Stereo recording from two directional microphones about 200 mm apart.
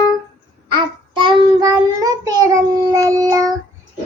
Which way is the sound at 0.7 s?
25° right (ahead or behind).